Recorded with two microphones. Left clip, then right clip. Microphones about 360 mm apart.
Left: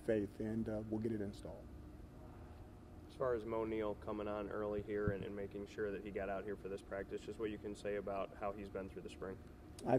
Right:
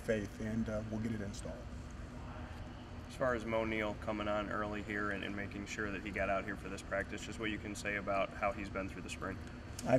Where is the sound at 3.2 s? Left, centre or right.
Left.